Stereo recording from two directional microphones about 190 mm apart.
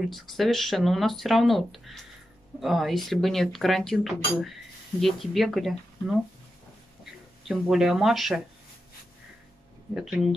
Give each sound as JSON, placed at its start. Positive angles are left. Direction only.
{"t": 0.1, "sound": "speech", "side_deg": 0}
{"t": 7.4, "sound": "speech", "side_deg": 0}
{"t": 9.9, "sound": "speech", "side_deg": 0}